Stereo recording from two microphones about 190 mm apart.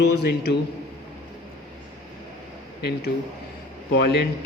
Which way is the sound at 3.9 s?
60° left (ahead or behind).